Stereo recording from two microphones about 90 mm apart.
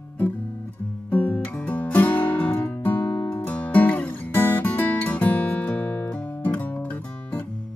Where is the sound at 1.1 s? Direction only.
20° left (ahead or behind).